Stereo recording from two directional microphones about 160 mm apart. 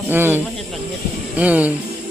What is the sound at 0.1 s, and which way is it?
Speech, 15° right (ahead or behind).